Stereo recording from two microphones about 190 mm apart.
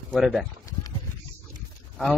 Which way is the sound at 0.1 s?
Centre (ahead or behind).